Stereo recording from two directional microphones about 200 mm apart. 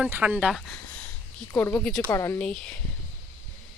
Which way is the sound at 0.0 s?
5° right (ahead or behind).